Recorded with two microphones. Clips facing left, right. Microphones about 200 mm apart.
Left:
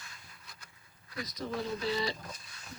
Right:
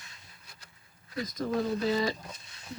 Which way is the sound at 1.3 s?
45° right (ahead or behind).